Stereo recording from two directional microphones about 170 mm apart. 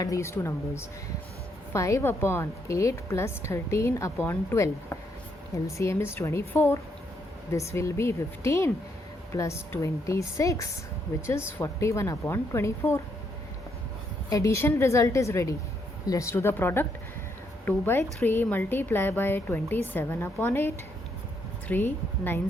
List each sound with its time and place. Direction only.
0.0 s a woman's voice: 20° left (ahead or behind)
14.3 s a woman's voice: 20° left (ahead or behind)